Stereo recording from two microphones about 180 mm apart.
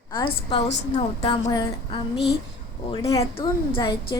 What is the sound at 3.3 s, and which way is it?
Speech, 30° left (ahead or behind).